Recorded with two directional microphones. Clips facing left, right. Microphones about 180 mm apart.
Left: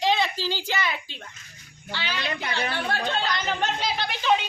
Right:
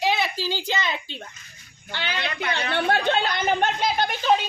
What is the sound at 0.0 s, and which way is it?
A child's voice, 10° right (ahead or behind).